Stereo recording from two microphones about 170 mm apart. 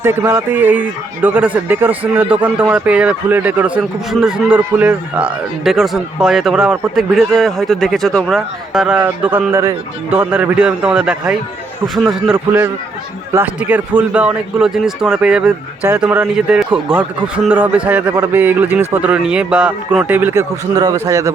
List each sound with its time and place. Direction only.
0.0 s a man's voice: 15° right (ahead or behind)
13.7 s a man's voice: 10° right (ahead or behind)
20.7 s a man's voice: 20° right (ahead or behind)